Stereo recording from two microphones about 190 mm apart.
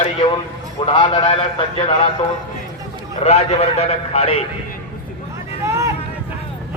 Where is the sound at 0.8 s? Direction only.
25° left (ahead or behind).